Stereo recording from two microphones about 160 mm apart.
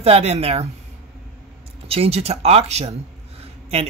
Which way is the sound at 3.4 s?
40° right (ahead or behind).